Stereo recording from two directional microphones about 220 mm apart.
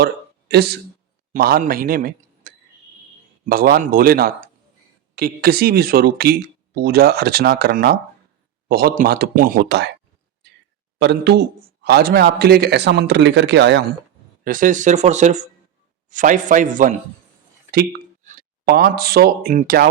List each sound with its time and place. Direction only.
0.0 s a sound: 45° right (ahead or behind)
1.3 s a man's voice: 40° right (ahead or behind)
10.9 s a man's voice: 50° right (ahead or behind)
14.4 s speech: 40° right (ahead or behind)